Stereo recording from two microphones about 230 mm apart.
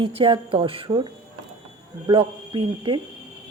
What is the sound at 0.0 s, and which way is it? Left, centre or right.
A woman's voice, right.